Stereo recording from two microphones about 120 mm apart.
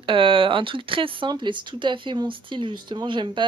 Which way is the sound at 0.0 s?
45° right (ahead or behind).